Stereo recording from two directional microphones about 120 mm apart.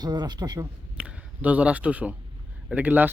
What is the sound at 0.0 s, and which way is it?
Speech, 35° right (ahead or behind).